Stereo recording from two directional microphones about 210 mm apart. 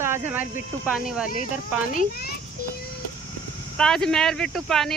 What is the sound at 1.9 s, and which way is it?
Speech, 45° left (ahead or behind).